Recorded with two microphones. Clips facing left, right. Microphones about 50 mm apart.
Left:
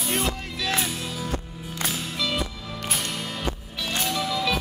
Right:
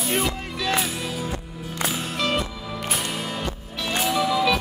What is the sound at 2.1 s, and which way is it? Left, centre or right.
Music, right.